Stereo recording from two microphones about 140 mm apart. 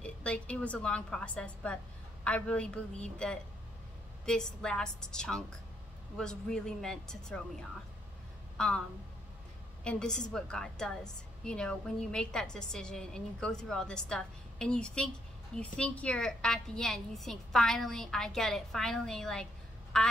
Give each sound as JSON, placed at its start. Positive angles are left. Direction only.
{"t": 0.0, "sound": "a woman's voice", "side_deg": 10}
{"t": 8.5, "sound": "a woman's voice", "side_deg": 5}
{"t": 9.8, "sound": "a woman's voice", "side_deg": 5}